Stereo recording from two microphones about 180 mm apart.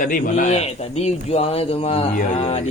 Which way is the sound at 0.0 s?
50° left (ahead or behind).